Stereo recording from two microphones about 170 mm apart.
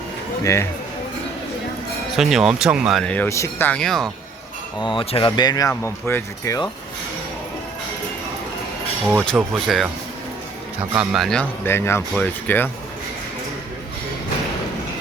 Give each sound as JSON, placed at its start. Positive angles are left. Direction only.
{"t": 0.4, "sound": "speech", "side_deg": 15}
{"t": 2.1, "sound": "speech", "side_deg": -5}
{"t": 4.8, "sound": "speech", "side_deg": 30}
{"t": 9.0, "sound": "speech", "side_deg": 5}
{"t": 10.9, "sound": "speech", "side_deg": 0}